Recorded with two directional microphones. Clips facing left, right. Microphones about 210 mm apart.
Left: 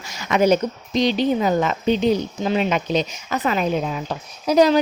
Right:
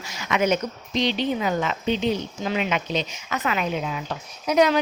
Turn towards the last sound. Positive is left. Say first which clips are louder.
# left 4 dB
turn(degrees=35)  # may be behind; listen again after turning